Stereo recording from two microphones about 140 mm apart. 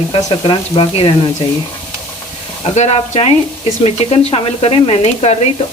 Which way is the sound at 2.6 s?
50° left (ahead or behind).